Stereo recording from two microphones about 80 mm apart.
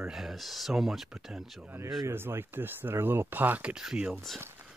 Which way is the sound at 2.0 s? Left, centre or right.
Right.